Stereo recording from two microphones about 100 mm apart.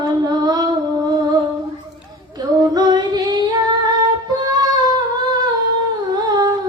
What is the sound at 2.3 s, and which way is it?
Female singing, 40° right (ahead or behind).